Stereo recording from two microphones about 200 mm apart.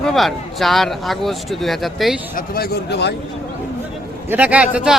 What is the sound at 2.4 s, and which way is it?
Speech, 50° left (ahead or behind).